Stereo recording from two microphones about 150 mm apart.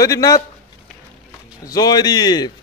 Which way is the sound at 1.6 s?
25° left (ahead or behind).